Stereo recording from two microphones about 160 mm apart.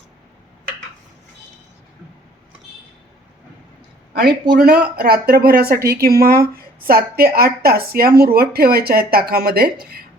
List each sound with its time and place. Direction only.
4.1 s speech: 85° right; by 9.7 s 70° right (ahead or behind)